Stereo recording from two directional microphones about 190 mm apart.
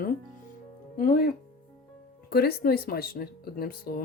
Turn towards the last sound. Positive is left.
turn(degrees=55)  # may be behind; listen again after turning